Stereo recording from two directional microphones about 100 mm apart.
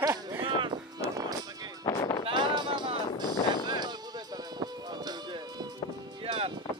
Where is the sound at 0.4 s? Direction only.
50° right (ahead or behind).